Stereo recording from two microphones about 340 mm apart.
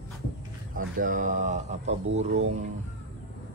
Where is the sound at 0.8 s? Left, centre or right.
Right.